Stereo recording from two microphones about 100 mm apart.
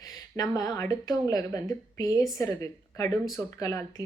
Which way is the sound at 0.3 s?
40° left (ahead or behind).